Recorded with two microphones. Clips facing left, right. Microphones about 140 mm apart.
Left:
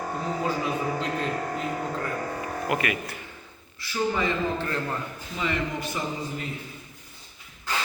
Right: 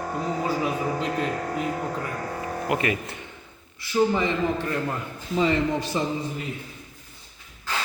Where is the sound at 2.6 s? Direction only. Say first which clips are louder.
Right 2 dB; 25° right (ahead or behind).